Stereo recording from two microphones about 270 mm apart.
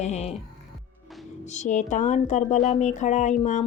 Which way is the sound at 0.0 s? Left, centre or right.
Left.